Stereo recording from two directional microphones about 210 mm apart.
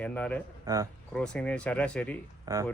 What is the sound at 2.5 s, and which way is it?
Speech, 15° right (ahead or behind).